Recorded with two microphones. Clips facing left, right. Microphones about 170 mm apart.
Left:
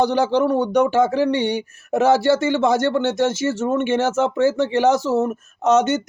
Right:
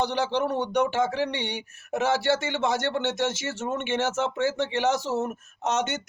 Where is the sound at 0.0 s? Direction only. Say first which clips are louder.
Left 8 dB; 40° left (ahead or behind).